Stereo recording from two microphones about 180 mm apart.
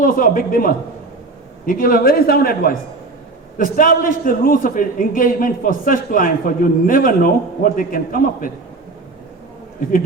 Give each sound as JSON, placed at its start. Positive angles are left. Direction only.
{"t": 0.0, "sound": "a man's voice", "side_deg": 50}